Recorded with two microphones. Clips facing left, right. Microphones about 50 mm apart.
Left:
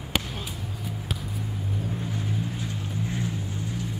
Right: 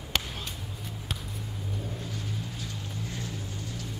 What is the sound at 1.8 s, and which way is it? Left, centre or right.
Boat, centre.